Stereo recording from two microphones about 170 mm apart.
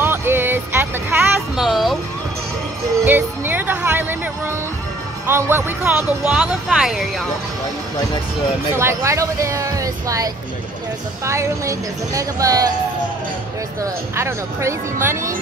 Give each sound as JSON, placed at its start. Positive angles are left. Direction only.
{"t": 0.0, "sound": "a sound", "side_deg": -15}
{"t": 1.6, "sound": "a sound", "side_deg": 0}
{"t": 3.1, "sound": "music", "side_deg": -10}
{"t": 5.2, "sound": "speech", "side_deg": -15}
{"t": 8.7, "sound": "speech", "side_deg": -15}
{"t": 13.8, "sound": "speech", "side_deg": -15}